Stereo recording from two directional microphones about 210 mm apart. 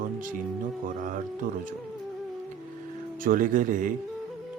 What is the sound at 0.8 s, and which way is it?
Speech, 40° right (ahead or behind).